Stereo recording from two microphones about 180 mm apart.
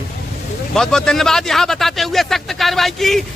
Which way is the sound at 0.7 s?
5° left (ahead or behind).